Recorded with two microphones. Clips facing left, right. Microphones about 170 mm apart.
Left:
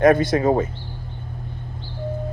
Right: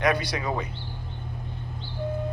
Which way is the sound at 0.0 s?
45° left (ahead or behind).